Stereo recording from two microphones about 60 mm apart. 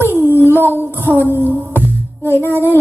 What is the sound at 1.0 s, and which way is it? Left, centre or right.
Music, right.